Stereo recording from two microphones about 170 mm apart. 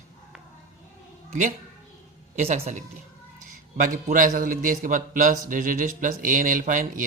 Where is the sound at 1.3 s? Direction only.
45° right (ahead or behind).